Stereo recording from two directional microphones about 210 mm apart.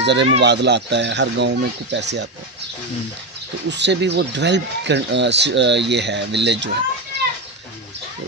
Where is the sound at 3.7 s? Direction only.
55° right (ahead or behind).